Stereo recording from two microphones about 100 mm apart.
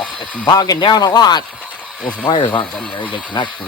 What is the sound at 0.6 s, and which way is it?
A man's voice, 45° left (ahead or behind).